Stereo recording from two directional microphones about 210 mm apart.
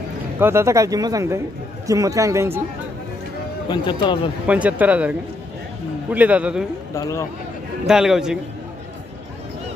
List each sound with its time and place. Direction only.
0.4 s speech: 10° right (ahead or behind)
3.6 s speech: 20° left (ahead or behind)
4.5 s speech: 5° right (ahead or behind)
7.0 s speech: 15° left (ahead or behind)
7.8 s a man's voice: centre (ahead or behind)